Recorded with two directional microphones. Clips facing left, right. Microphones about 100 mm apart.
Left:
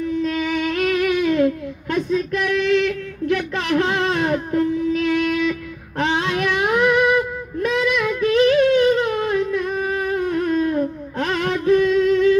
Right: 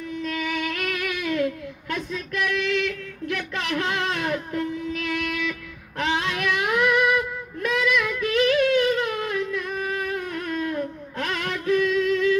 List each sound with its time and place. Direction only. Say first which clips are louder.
0.2 s humming: left 6 dB; 30° left (ahead or behind)